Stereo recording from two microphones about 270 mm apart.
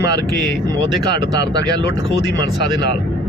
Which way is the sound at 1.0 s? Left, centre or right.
Left.